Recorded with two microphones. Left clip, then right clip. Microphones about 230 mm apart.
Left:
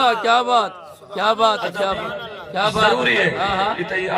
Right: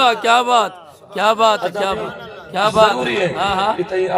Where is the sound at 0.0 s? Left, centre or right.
Centre.